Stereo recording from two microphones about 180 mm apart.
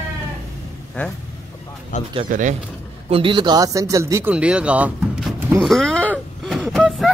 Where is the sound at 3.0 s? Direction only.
30° right (ahead or behind); by 5.4 s centre (ahead or behind).